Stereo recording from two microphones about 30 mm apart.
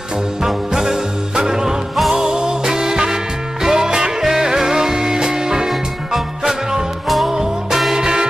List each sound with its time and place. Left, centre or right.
0.4 s music: centre
7.2 s music: centre